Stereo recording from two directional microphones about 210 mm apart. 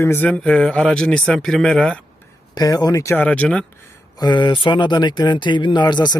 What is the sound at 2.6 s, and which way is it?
Speech, 20° left (ahead or behind).